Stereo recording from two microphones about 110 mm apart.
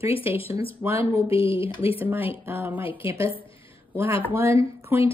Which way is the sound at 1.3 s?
55° left (ahead or behind).